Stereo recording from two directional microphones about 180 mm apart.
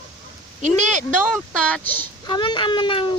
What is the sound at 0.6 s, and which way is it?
Speech, 40° right (ahead or behind).